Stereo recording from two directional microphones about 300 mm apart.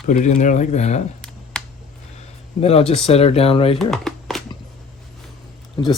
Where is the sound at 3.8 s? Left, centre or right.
Centre.